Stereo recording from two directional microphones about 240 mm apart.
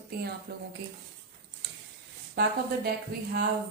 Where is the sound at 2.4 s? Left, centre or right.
Right.